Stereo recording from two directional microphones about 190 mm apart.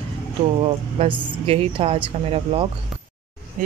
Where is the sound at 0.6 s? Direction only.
30° right (ahead or behind).